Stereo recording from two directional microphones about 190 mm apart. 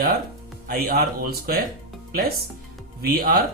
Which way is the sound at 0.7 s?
50° right (ahead or behind).